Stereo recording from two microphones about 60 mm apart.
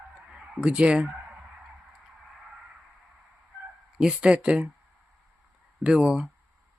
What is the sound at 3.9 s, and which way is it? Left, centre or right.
Speech, centre.